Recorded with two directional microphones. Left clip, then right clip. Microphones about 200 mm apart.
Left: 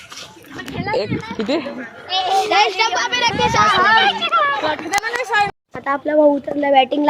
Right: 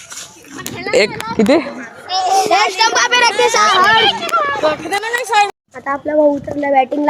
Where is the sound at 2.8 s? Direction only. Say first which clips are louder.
Right 5 dB; 50° right (ahead or behind).